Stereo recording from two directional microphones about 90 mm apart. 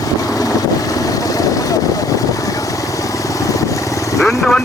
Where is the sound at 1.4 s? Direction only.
40° left (ahead or behind).